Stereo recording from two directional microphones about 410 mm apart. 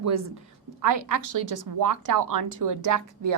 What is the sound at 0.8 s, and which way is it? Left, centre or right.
A woman's voice, right.